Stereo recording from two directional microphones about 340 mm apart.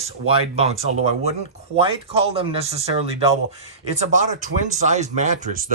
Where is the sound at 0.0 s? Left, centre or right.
Centre.